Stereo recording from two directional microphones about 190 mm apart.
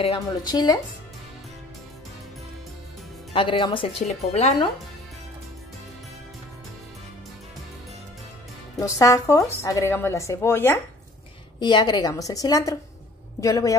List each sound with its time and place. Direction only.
0.0 s speech: 25° left (ahead or behind)
3.3 s speech: 25° left (ahead or behind)
8.7 s a woman's voice: 15° left (ahead or behind)
11.6 s a woman's voice: 25° left (ahead or behind)